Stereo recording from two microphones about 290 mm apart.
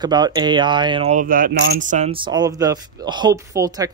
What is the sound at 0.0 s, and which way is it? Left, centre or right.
Speech, centre.